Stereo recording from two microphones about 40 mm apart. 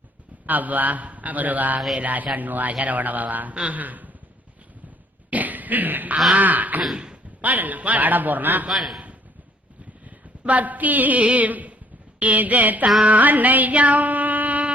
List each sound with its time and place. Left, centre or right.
0.4 s a man's voice: right
5.3 s cough: right
6.3 s a man's voice: right
6.9 s a sound: right
7.4 s a man's voice: right
8.7 s a man's voice: centre
10.4 s a woman's voice: right
13.1 s music: right